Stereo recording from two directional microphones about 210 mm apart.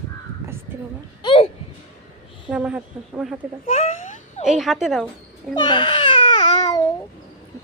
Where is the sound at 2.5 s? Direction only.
5° right (ahead or behind).